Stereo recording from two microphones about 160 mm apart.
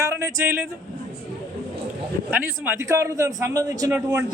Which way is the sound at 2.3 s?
10° right (ahead or behind).